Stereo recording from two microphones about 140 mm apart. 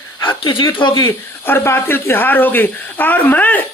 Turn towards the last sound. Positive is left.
turn(degrees=10)  # may be behind; listen again after turning